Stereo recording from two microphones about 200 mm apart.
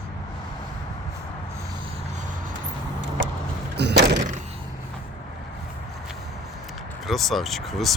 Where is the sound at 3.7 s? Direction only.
55° right (ahead or behind).